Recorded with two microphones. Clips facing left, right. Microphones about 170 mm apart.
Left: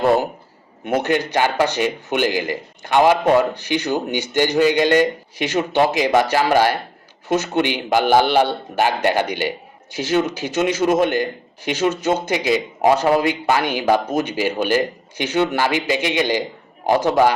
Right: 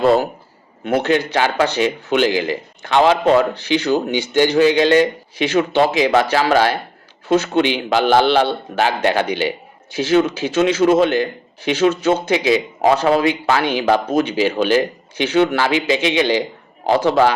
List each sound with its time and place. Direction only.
0.0 s a man's voice: 15° left (ahead or behind)